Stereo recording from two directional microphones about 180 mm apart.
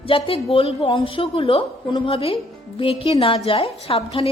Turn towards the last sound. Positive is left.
turn(degrees=35)  # may be behind; listen again after turning